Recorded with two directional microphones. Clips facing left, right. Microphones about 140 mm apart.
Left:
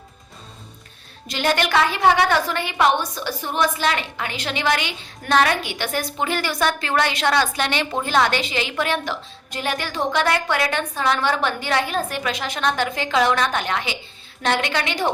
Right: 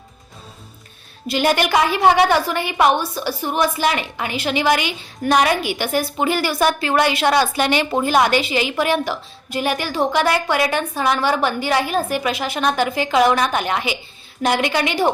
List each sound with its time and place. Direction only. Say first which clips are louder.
1.3 s a woman's voice: right 3 dB; 10° right (ahead or behind)